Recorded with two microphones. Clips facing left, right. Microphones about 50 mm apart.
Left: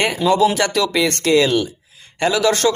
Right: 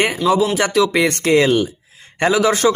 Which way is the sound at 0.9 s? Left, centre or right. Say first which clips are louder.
Right 1 dB; right.